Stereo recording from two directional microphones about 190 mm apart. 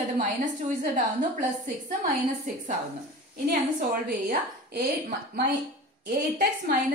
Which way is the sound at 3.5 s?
50° right (ahead or behind).